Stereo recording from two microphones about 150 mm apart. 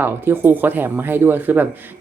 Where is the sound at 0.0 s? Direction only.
15° right (ahead or behind).